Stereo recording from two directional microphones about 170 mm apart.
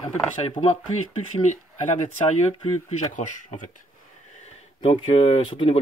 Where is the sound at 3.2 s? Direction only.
50° left (ahead or behind).